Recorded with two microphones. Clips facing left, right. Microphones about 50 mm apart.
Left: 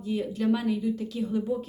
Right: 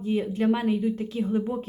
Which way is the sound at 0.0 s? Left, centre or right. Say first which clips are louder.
Right 3 dB; right.